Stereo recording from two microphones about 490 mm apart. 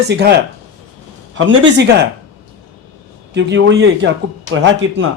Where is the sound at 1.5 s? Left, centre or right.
Right.